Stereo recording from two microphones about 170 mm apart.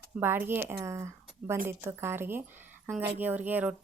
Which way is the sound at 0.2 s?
10° right (ahead or behind).